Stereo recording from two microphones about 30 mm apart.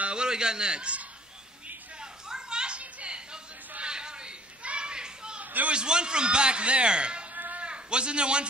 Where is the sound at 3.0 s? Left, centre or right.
Right.